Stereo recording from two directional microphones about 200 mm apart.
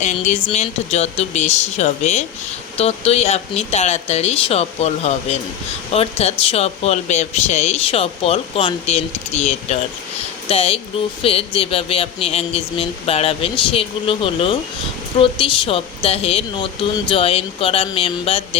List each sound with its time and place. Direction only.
0.0 s speech: 35° left (ahead or behind)